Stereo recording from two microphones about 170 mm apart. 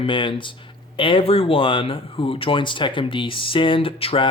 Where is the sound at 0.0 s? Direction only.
30° left (ahead or behind).